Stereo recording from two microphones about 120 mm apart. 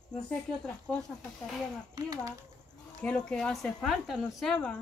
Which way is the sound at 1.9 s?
30° right (ahead or behind).